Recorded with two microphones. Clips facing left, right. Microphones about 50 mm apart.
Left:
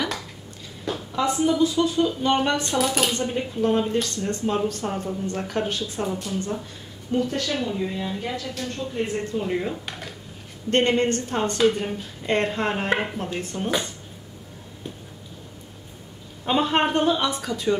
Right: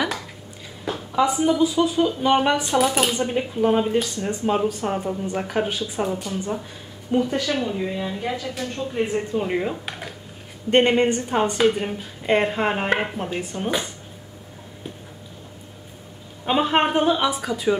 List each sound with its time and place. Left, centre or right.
0.8 s speech: centre
16.4 s speech: centre